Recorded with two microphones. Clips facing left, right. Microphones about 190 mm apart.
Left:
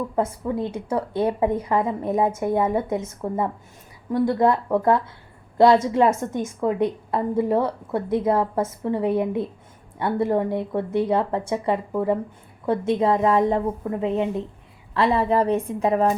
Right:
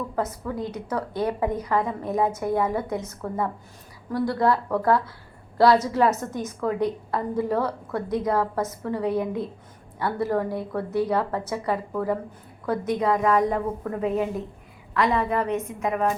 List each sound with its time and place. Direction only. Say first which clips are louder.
0.2 s a woman's voice: left 4 dB; 25° left (ahead or behind)